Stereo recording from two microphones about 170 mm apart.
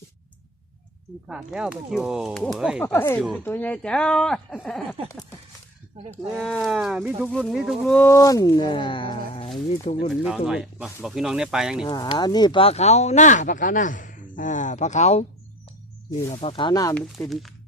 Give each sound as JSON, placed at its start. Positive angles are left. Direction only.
{"t": 1.3, "sound": "speech", "side_deg": -5}
{"t": 2.8, "sound": "speech", "side_deg": 15}
{"t": 6.4, "sound": "speech", "side_deg": 0}
{"t": 7.9, "sound": "speech", "side_deg": 15}
{"t": 10.1, "sound": "speech", "side_deg": 0}
{"t": 11.9, "sound": "speech", "side_deg": 25}
{"t": 16.3, "sound": "speech", "side_deg": 35}
{"t": 17.2, "sound": "speech", "side_deg": 10}